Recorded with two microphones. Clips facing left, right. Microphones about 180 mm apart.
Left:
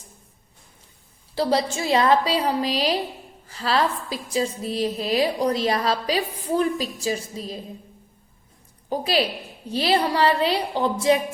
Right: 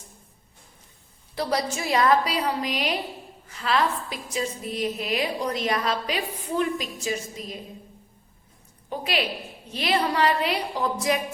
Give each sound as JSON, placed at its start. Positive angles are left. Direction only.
{"t": 1.4, "sound": "a woman's voice", "side_deg": 30}
{"t": 8.9, "sound": "a woman's voice", "side_deg": 35}